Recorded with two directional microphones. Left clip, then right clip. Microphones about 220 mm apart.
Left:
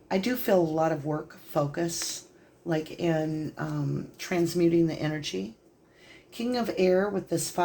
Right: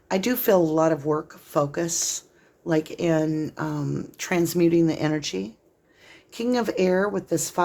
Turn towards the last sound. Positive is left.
turn(degrees=-45)  # may be behind; listen again after turning